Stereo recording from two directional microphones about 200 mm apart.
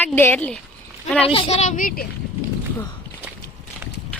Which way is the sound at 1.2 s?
30° left (ahead or behind).